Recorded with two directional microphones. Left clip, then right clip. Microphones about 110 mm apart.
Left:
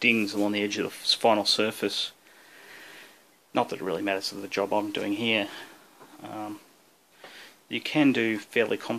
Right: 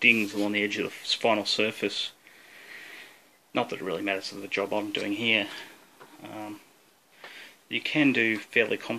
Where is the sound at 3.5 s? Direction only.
10° left (ahead or behind).